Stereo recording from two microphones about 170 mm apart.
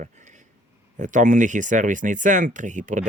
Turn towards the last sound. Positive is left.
turn(degrees=-45)  # may be behind; listen again after turning